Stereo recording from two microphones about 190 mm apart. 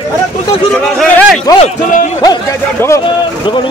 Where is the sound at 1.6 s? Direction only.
40° left (ahead or behind).